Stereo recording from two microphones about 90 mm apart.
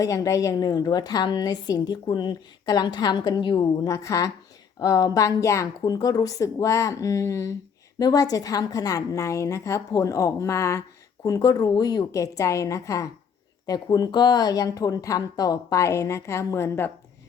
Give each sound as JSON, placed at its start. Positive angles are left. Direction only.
{"t": 0.0, "sound": "a woman's voice", "side_deg": 40}
{"t": 3.8, "sound": "a woman's voice", "side_deg": 35}
{"t": 13.7, "sound": "a woman's voice", "side_deg": 45}